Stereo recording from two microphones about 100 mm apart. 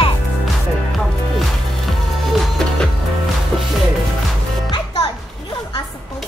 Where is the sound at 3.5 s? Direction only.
10° left (ahead or behind).